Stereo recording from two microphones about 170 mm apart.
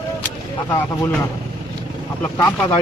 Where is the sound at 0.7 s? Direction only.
15° left (ahead or behind).